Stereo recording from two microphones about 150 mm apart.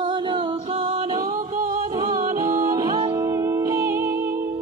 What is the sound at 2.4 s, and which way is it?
Music, 20° right (ahead or behind).